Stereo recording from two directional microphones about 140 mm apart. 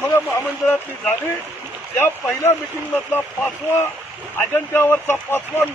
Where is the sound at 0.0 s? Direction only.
15° left (ahead or behind).